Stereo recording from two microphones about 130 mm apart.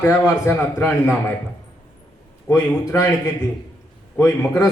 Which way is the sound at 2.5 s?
25° left (ahead or behind).